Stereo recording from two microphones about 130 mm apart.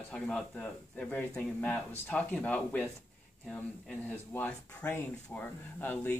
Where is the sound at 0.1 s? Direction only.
5° left (ahead or behind).